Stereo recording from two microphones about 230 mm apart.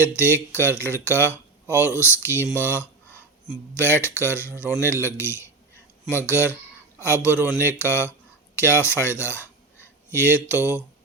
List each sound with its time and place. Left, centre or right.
0.0 s speech: centre